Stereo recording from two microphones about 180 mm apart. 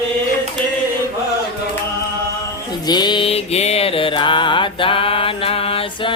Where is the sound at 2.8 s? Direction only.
25° left (ahead or behind).